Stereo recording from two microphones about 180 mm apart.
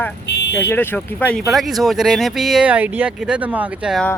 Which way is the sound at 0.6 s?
15° left (ahead or behind).